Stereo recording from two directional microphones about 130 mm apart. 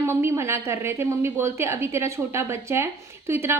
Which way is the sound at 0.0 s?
20° right (ahead or behind).